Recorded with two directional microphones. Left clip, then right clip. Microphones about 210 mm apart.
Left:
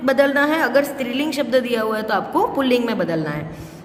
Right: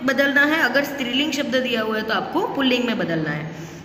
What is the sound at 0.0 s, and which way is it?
A woman's voice, 50° left (ahead or behind).